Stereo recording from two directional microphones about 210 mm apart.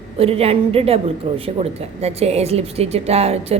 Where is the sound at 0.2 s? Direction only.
30° right (ahead or behind).